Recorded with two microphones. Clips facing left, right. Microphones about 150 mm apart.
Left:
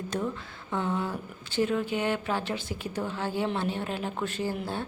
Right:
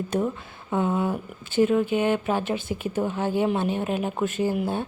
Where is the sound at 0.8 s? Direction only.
15° right (ahead or behind).